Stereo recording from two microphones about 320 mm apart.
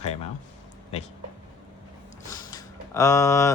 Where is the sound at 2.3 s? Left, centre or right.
Centre.